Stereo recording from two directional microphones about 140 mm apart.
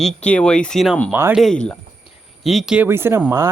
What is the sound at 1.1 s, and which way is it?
Speech, 15° right (ahead or behind).